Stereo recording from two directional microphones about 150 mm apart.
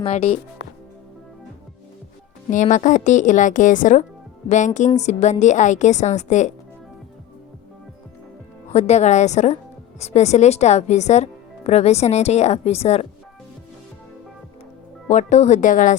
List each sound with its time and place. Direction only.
0.0 s speech: 40° left (ahead or behind)
2.5 s speech: 55° left (ahead or behind)
8.7 s speech: 45° left (ahead or behind)
15.1 s speech: 50° left (ahead or behind)